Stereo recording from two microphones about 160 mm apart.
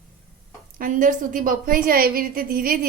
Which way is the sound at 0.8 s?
55° right (ahead or behind).